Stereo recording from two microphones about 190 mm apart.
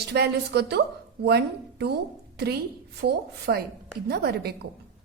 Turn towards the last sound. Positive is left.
turn(degrees=-55)  # may be behind; listen again after turning